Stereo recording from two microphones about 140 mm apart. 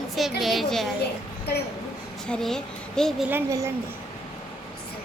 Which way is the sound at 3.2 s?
20° right (ahead or behind).